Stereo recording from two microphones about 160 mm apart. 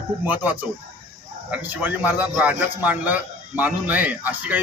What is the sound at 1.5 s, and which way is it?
A man's voice, 10° right (ahead or behind).